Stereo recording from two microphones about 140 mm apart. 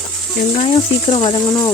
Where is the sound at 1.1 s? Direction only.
35° left (ahead or behind).